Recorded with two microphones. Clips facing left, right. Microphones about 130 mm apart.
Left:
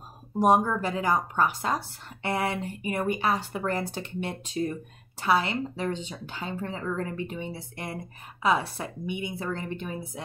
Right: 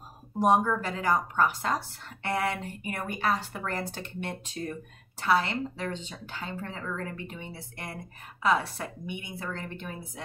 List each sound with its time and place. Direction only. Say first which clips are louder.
0.4 s a woman's voice: left 2 dB; 15° left (ahead or behind)